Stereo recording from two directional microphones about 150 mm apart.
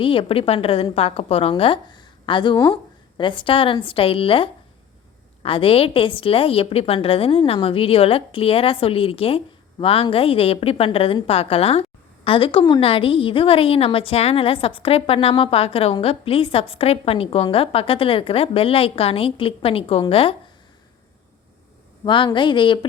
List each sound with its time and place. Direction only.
0.0 s a woman's voice: 35° left (ahead or behind)
22.0 s a woman's voice: 30° left (ahead or behind)